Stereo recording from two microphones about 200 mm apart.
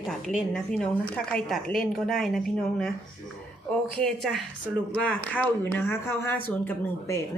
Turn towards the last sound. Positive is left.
turn(degrees=10)  # may be behind; listen again after turning